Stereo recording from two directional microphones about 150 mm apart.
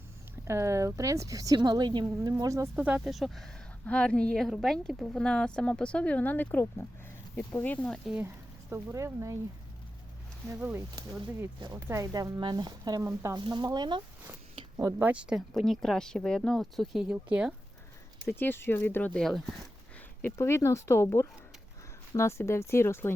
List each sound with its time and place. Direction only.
0.4 s a woman's voice: 20° right (ahead or behind)
2.8 s speech: 5° right (ahead or behind)
8.7 s a woman's voice: 20° right (ahead or behind)
10.5 s a woman's voice: 15° right (ahead or behind)
13.4 s a woman's voice: 30° right (ahead or behind)
15.0 s speech: 5° right (ahead or behind)
18.3 s speech: 15° left (ahead or behind)
20.2 s speech: 20° left (ahead or behind)